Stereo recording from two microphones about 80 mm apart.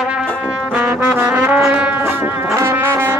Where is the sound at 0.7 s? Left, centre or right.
Right.